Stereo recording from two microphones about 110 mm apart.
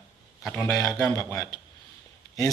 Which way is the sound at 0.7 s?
30° left (ahead or behind).